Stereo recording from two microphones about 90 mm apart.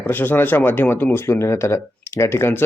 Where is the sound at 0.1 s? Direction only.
20° left (ahead or behind).